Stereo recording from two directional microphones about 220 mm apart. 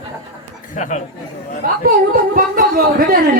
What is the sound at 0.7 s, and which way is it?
Speech, 35° left (ahead or behind).